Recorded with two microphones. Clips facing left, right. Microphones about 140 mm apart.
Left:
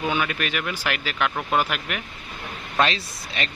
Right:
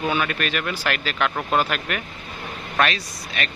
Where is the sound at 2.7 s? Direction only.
25° left (ahead or behind).